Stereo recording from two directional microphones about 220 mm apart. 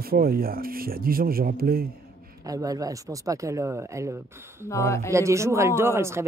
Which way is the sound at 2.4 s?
15° right (ahead or behind).